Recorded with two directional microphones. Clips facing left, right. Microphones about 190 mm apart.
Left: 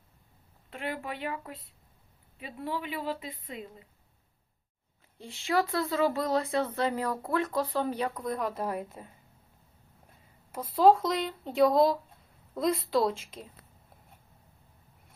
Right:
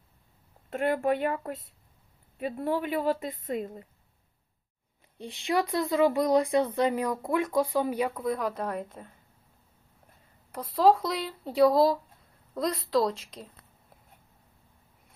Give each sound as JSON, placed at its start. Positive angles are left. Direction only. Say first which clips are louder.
{"t": 0.7, "sound": "a woman's voice", "louder": "right 10 dB", "side_deg": -45}
{"t": 5.1, "sound": "speech", "louder": "right 1 dB", "side_deg": -20}
{"t": 10.5, "sound": "speech", "louder": "left 1 dB", "side_deg": 5}